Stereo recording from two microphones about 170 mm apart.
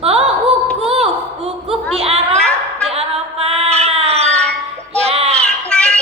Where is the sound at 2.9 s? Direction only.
35° right (ahead or behind).